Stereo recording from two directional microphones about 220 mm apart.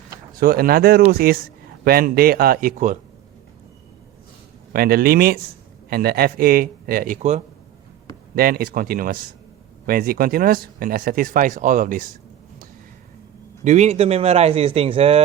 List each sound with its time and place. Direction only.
0.3 s a man's voice: 40° right (ahead or behind)
4.7 s a man's voice: 40° right (ahead or behind)
8.4 s speech: 40° right (ahead or behind)
13.7 s speech: 30° right (ahead or behind)